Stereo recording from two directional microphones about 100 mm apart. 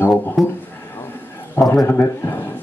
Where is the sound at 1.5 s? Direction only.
25° left (ahead or behind).